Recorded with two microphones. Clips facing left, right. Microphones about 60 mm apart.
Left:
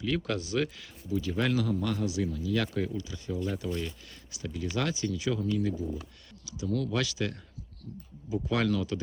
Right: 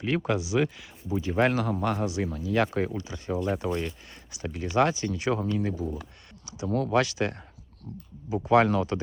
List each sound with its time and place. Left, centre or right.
0.0 s speech: right
0.3 s speech: centre
1.1 s speech: right
8.4 s speech: right